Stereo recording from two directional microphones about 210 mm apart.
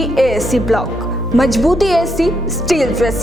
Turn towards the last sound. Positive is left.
turn(degrees=0)  # may be behind; listen again after turning